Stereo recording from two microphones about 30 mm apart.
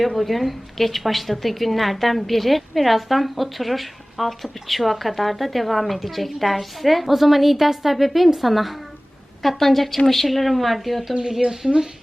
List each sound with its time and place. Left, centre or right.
0.0 s a woman's voice: centre
11.4 s speech: centre